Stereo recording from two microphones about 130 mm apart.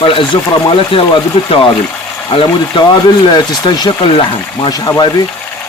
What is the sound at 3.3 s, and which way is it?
Speech, 35° left (ahead or behind).